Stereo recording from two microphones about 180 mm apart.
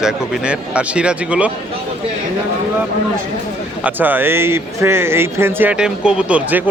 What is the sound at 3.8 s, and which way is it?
Speech, 10° right (ahead or behind).